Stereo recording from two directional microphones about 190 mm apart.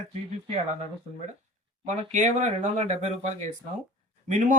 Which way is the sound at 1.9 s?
40° right (ahead or behind).